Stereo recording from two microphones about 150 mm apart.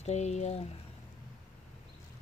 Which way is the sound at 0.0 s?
50° left (ahead or behind).